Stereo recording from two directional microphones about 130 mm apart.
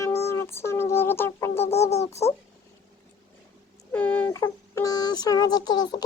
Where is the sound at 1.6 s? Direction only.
55° left (ahead or behind).